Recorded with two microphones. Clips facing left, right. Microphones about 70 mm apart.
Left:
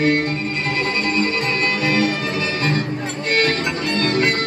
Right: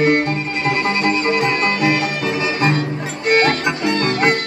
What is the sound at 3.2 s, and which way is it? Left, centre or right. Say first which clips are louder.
Music: right 5 dB; right.